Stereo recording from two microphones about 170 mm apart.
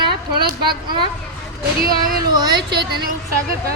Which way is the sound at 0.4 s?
65° right (ahead or behind).